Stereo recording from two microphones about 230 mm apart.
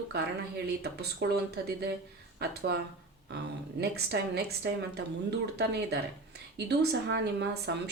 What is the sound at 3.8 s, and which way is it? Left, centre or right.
Speech, right.